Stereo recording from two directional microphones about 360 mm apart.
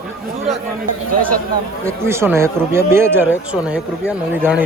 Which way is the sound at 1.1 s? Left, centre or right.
Right.